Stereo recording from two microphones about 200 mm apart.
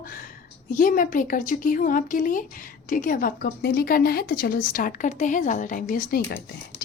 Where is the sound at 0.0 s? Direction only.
45° left (ahead or behind).